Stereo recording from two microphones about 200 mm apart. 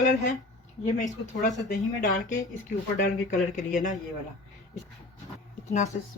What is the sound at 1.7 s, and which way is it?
Speech, 45° left (ahead or behind).